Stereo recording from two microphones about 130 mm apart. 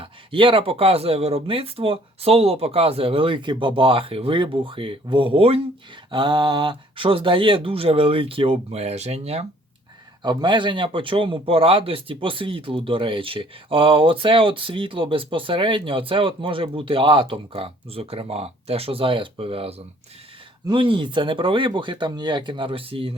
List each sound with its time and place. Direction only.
0.0 s speech: 40° right (ahead or behind)
10.2 s speech: 35° right (ahead or behind)